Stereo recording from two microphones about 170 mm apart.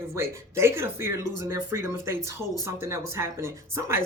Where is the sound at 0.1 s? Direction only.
15° right (ahead or behind).